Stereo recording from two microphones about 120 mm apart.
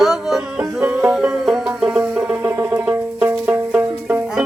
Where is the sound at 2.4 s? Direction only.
20° right (ahead or behind).